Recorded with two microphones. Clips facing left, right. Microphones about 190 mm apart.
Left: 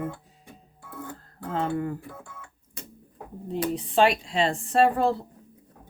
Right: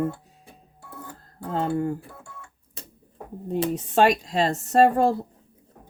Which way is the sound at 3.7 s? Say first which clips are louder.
Right 1 dB; 45° right (ahead or behind).